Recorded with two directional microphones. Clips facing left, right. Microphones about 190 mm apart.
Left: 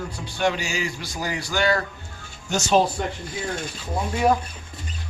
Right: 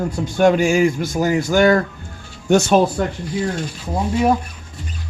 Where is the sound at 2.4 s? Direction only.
60° right (ahead or behind).